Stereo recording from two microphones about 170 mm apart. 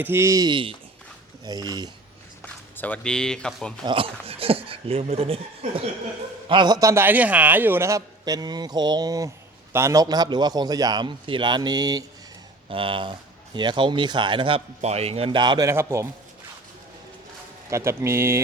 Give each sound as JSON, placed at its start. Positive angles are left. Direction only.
{"t": 0.0, "sound": "speech", "side_deg": -15}
{"t": 2.4, "sound": "speech", "side_deg": 10}
{"t": 3.8, "sound": "speech", "side_deg": -30}
{"t": 6.5, "sound": "speech", "side_deg": -25}
{"t": 17.7, "sound": "speech", "side_deg": -15}